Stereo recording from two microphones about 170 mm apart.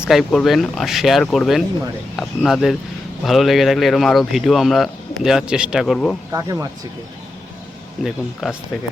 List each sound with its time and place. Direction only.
0.0 s speech: centre (ahead or behind)
6.3 s speech: 20° right (ahead or behind)
8.0 s speech: centre (ahead or behind)